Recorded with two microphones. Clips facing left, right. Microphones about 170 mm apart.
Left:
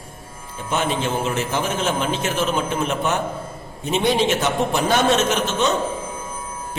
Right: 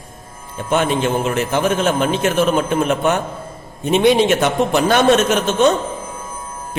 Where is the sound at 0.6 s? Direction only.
60° right (ahead or behind).